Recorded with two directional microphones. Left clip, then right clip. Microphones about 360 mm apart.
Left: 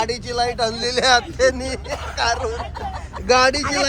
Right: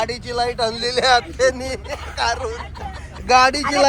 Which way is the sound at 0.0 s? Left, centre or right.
Centre.